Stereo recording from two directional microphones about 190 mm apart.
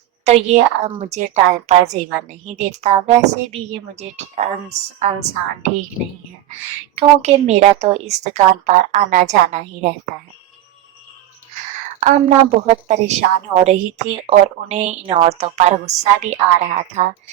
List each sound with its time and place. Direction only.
0.3 s a woman's voice: 35° right (ahead or behind)
6.9 s a woman's voice: 35° right (ahead or behind)
11.9 s a woman's voice: 40° right (ahead or behind)
14.3 s a woman's voice: 35° right (ahead or behind)